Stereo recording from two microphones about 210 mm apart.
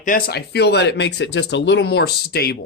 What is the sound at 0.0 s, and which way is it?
Speech, 45° left (ahead or behind).